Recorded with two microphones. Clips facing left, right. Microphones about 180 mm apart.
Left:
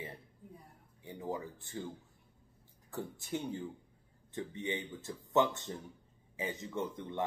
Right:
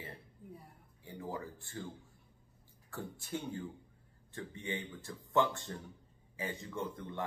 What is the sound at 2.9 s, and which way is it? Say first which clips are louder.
Speech: left 2 dB; 20° left (ahead or behind).